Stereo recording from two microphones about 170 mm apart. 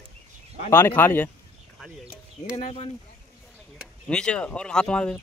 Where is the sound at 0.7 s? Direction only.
15° left (ahead or behind).